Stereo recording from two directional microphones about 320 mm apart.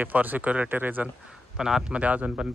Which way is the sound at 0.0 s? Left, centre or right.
Centre.